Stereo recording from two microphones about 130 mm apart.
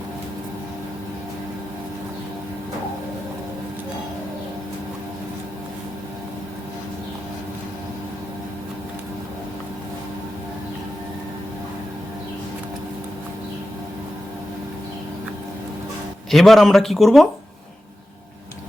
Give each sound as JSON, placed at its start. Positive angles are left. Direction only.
{"t": 16.3, "sound": "a man's voice", "side_deg": 0}